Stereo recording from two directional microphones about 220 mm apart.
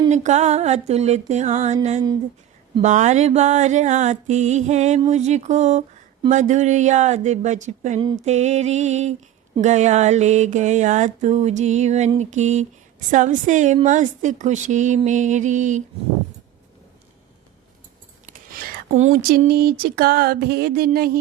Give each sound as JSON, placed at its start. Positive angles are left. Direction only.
{"t": 0.0, "sound": "mantra", "side_deg": -30}
{"t": 18.9, "sound": "mantra", "side_deg": -35}
{"t": 19.5, "sound": "music", "side_deg": -45}